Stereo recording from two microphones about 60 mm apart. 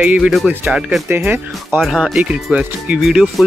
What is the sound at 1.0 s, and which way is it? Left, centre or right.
Speech, right.